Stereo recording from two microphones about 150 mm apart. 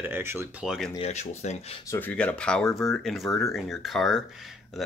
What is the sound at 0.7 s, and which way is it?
Speech, 5° left (ahead or behind).